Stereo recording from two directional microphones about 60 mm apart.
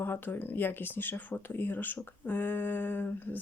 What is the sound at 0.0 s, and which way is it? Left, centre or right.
Speech, left.